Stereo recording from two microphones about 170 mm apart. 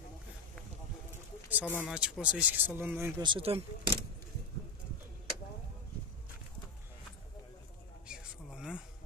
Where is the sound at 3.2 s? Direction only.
30° right (ahead or behind).